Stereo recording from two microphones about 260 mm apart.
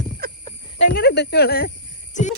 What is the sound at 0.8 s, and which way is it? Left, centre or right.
Speech, left.